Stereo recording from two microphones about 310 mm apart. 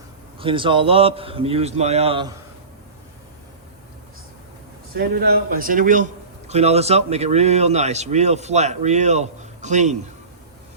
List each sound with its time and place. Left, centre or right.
0.3 s a man's voice: centre
4.9 s speech: right